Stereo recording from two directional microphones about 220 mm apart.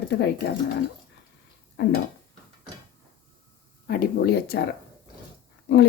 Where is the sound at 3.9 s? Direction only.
45° left (ahead or behind).